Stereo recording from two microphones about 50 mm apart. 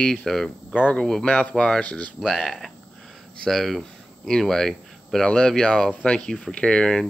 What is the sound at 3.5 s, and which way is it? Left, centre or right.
Speech, centre.